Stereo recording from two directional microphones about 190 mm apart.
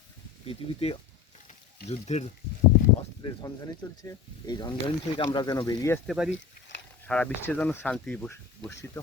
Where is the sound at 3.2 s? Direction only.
25° left (ahead or behind).